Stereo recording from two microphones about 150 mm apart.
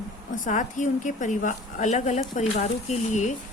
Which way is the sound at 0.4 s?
55° left (ahead or behind).